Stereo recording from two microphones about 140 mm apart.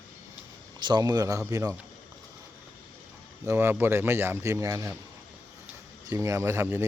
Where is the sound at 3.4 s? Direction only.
20° right (ahead or behind).